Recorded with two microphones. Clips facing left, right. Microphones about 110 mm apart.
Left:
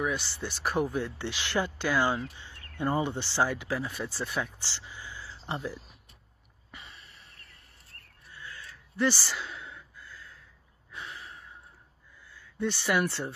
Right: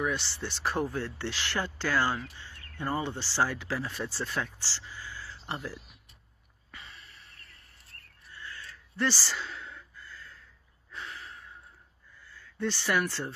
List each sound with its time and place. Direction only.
0.0 s speech: 10° left (ahead or behind)
6.7 s a sound: 20° left (ahead or behind)
8.3 s gasp: 10° left (ahead or behind)
12.5 s speech: 15° left (ahead or behind)